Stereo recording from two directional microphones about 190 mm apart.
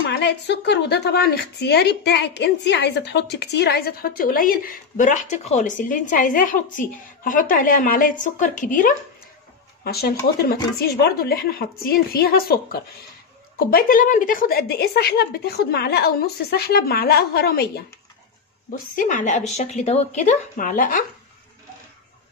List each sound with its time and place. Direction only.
0.1 s a woman's voice: 65° left (ahead or behind); by 8.9 s 45° left (ahead or behind)
9.8 s a woman's voice: 55° left (ahead or behind)
18.7 s a woman's voice: 45° left (ahead or behind)